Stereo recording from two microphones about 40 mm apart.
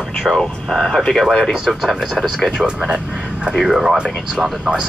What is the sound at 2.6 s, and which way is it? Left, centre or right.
Speech, centre.